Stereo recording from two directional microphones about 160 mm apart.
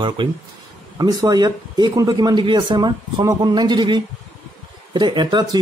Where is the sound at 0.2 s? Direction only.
30° right (ahead or behind).